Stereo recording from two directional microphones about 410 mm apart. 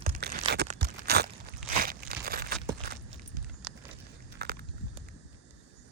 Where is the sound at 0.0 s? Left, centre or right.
Right.